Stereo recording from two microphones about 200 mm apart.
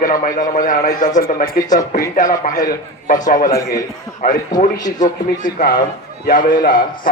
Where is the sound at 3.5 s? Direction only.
15° left (ahead or behind).